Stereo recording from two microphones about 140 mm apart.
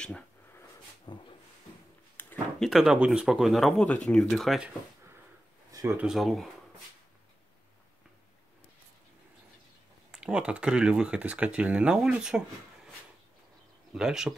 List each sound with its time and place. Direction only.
1.1 s speech: 30° left (ahead or behind)
2.2 s a sound: 15° left (ahead or behind)
2.6 s speech: centre (ahead or behind)
5.7 s a sound: 25° right (ahead or behind)
5.9 s speech: centre (ahead or behind)
10.1 s speech: 5° right (ahead or behind)
13.9 s speech: 5° right (ahead or behind)